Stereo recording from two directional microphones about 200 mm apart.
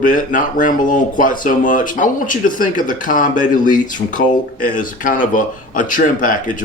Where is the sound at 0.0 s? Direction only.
40° left (ahead or behind).